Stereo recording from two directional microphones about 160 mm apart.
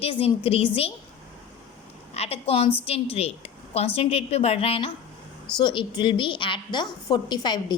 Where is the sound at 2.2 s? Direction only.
40° left (ahead or behind).